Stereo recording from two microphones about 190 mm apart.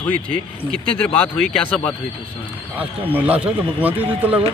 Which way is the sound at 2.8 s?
10° right (ahead or behind).